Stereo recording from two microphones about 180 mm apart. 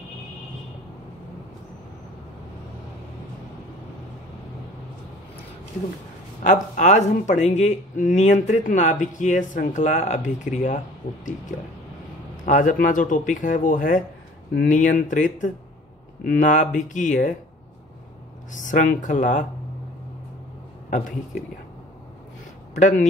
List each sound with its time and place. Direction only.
6.4 s speech: 45° left (ahead or behind)
12.4 s speech: 45° left (ahead or behind)
18.5 s speech: 45° left (ahead or behind)
22.8 s speech: 45° left (ahead or behind)